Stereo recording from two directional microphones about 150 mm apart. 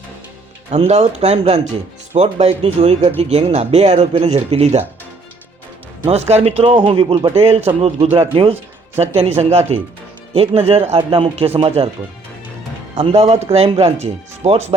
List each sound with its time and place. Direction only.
0.7 s speech: 45° right (ahead or behind)
6.1 s a man's voice: 45° right (ahead or behind)
13.0 s speech: 45° right (ahead or behind)